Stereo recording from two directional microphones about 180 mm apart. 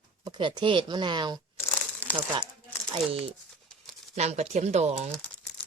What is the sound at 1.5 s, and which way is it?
Crumpling, 15° left (ahead or behind).